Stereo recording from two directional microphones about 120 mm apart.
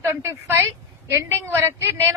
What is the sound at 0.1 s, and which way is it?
A woman's voice, 20° right (ahead or behind).